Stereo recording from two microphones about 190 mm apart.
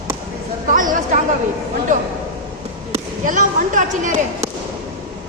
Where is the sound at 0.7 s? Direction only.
45° right (ahead or behind).